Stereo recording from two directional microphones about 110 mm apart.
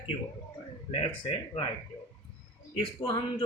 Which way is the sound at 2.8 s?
50° left (ahead or behind).